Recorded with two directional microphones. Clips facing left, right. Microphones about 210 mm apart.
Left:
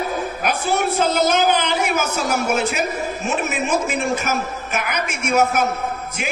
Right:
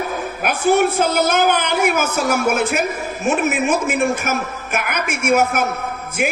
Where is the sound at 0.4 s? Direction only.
55° right (ahead or behind).